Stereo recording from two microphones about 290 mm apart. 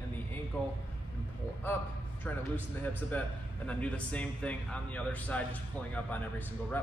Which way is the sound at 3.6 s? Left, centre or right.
Centre.